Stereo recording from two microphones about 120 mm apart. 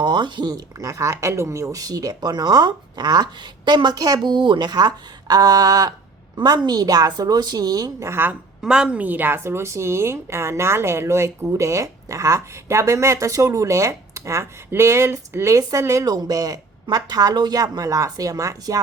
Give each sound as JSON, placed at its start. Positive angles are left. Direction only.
{"t": 0.0, "sound": "speech", "side_deg": -40}
{"t": 8.6, "sound": "a woman's voice", "side_deg": -5}